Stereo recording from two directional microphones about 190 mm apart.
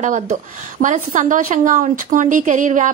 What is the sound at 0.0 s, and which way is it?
A woman's voice, 40° right (ahead or behind).